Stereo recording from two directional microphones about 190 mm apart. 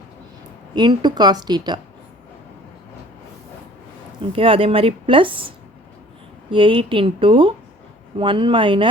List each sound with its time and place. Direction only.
0.8 s speech: 20° right (ahead or behind)
4.3 s speech: 30° right (ahead or behind)